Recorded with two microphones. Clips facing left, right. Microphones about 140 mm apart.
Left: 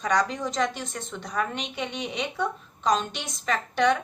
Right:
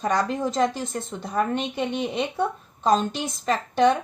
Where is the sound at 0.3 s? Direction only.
30° right (ahead or behind).